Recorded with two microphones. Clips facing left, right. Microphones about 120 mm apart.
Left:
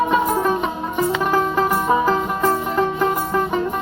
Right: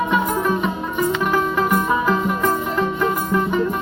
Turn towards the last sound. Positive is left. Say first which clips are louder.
# even
turn(degrees=35)  # may be behind; listen again after turning